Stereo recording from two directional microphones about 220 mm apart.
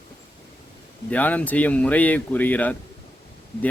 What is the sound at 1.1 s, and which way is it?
A man's voice, 5° left (ahead or behind).